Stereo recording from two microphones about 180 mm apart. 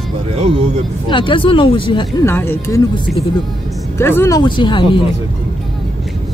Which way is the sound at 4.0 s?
15° left (ahead or behind).